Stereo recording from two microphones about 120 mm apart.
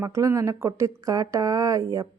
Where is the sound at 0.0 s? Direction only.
25° right (ahead or behind).